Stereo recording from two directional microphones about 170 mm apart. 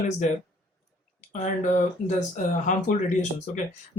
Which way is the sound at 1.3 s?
45° left (ahead or behind).